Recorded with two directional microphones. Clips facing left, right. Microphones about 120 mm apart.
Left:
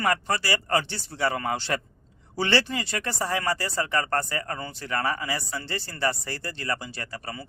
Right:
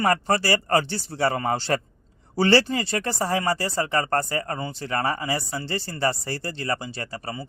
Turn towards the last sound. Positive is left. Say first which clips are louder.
# right 3 dB
turn(degrees=-30)  # may be behind; listen again after turning